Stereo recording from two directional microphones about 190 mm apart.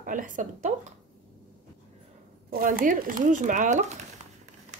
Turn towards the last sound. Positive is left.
turn(degrees=-40)  # may be behind; listen again after turning